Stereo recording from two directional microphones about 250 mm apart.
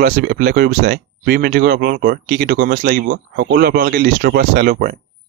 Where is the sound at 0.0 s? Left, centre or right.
Right.